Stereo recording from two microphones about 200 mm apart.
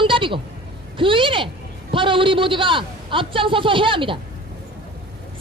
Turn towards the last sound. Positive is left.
turn(degrees=-25)  # may be behind; listen again after turning